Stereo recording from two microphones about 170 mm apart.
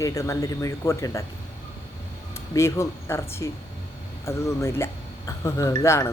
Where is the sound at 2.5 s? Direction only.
15° left (ahead or behind).